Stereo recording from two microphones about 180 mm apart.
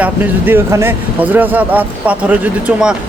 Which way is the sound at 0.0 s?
10° right (ahead or behind).